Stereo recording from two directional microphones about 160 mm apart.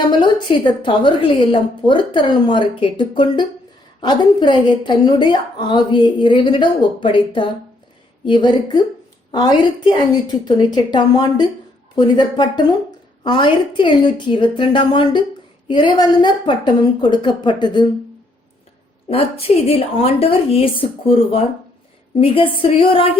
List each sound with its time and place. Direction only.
0.2 s a woman's voice: 30° left (ahead or behind)
19.0 s a woman's voice: 40° left (ahead or behind)